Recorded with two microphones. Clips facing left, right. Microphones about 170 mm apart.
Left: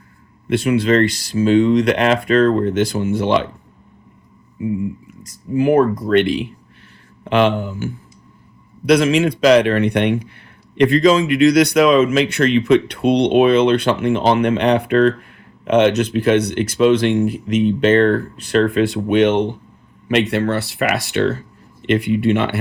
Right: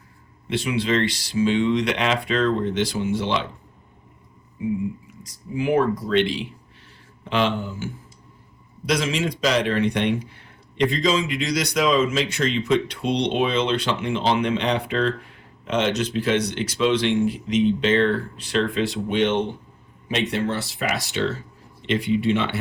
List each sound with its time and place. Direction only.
0.4 s speech: 55° left (ahead or behind)
5.2 s speech: 45° left (ahead or behind)
8.9 s speech: 60° left (ahead or behind)